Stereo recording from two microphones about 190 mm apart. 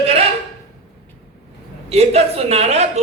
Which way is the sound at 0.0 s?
30° right (ahead or behind).